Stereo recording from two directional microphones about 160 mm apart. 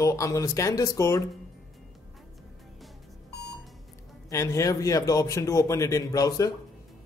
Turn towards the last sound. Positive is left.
turn(degrees=20)  # may be behind; listen again after turning